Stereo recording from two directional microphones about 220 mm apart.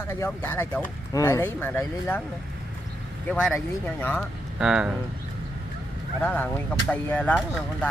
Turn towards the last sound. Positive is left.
turn(degrees=5)  # may be behind; listen again after turning